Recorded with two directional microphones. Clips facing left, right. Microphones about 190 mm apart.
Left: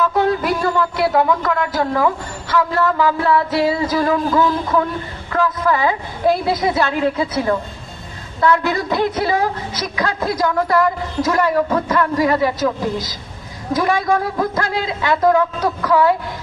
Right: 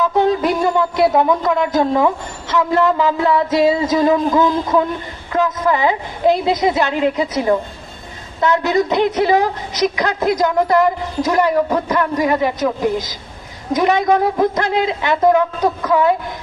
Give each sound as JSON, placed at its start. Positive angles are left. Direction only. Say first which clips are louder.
{"t": 0.0, "sound": "a woman's voice", "louder": "right 2 dB", "side_deg": -20}